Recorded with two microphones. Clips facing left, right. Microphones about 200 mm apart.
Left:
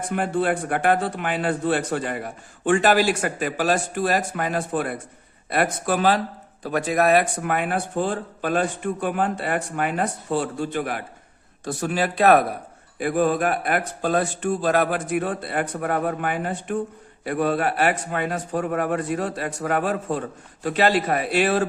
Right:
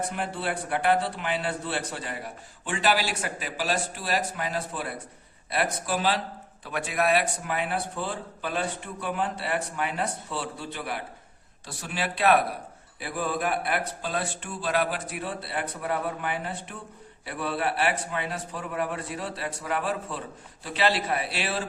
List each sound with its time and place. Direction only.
0.1 s speech: 50° left (ahead or behind)